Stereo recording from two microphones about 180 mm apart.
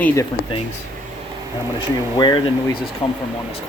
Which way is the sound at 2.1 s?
25° left (ahead or behind).